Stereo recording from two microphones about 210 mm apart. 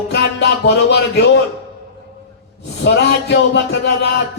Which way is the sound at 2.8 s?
55° left (ahead or behind).